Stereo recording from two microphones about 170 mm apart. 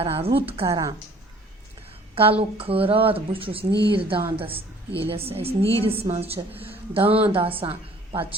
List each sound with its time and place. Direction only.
0.0 s speech: 35° right (ahead or behind)
0.7 s speech: 20° right (ahead or behind)
2.4 s speech: 35° right (ahead or behind)
6.3 s speech: 10° right (ahead or behind)
6.9 s speech: 35° right (ahead or behind)